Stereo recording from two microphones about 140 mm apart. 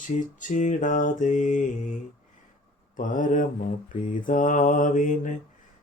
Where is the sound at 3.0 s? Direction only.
70° left (ahead or behind).